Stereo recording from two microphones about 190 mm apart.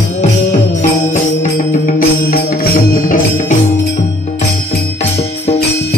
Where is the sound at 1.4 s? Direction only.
45° left (ahead or behind).